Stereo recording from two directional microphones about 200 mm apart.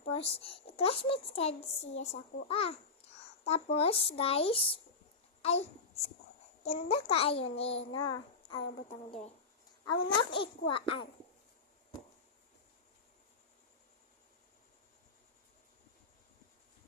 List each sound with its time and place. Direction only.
0.1 s a child's voice: 30° left (ahead or behind)
3.0 s a sound: 30° left (ahead or behind)
3.4 s a child's voice: 30° left (ahead or behind)
9.8 s a child's voice: 25° left (ahead or behind)